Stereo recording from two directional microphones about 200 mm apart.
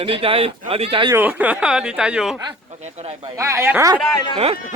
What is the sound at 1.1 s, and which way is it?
Speech, 10° right (ahead or behind).